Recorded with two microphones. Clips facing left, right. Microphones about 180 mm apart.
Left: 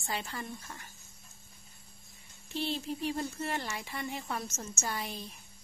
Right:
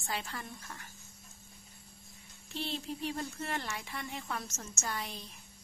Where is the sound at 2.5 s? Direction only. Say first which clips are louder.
Left 4 dB; centre (ahead or behind).